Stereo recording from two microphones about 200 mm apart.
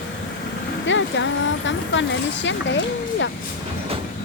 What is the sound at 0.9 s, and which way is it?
Speech, 65° left (ahead or behind).